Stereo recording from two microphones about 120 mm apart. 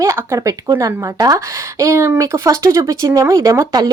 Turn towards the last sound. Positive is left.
turn(degrees=-30)  # may be behind; listen again after turning